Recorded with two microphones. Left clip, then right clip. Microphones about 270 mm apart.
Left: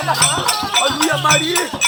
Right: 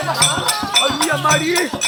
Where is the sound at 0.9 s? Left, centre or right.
Left.